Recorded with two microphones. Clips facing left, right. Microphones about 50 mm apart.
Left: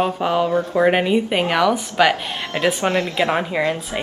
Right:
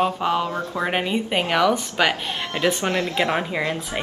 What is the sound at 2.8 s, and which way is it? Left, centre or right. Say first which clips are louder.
Speech: left 3 dB; left.